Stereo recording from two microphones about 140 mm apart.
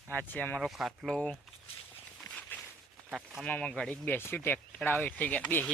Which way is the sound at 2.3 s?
5° left (ahead or behind).